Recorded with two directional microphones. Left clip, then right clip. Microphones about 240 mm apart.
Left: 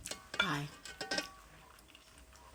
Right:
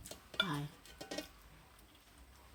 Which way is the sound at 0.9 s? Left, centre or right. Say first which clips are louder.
Left 7 dB; centre.